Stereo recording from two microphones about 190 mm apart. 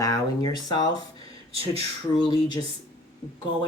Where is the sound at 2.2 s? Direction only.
25° left (ahead or behind).